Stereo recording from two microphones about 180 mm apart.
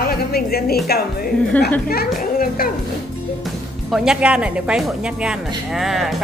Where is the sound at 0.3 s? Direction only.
60° left (ahead or behind).